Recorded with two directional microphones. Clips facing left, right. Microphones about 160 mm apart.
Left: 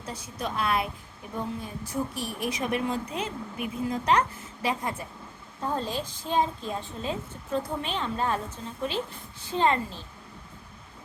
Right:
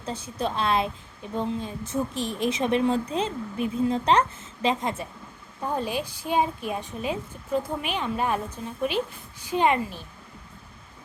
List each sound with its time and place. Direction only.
0.0 s a woman's voice: 30° right (ahead or behind)